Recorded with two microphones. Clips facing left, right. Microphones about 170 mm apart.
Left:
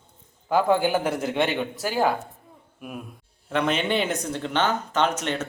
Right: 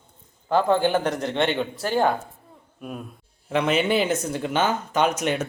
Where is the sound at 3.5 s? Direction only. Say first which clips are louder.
Right 2 dB; 5° right (ahead or behind).